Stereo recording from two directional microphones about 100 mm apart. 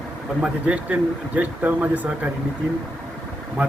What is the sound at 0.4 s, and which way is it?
Speech, 10° right (ahead or behind).